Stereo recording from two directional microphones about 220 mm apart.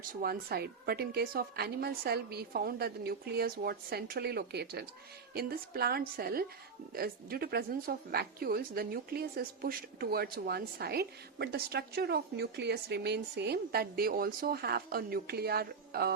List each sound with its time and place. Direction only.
0.1 s a woman's voice: 40° right (ahead or behind)